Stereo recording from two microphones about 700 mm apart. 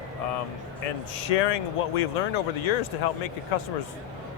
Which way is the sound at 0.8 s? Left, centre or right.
Left.